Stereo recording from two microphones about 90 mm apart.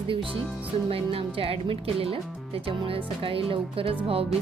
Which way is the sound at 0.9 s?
90° right.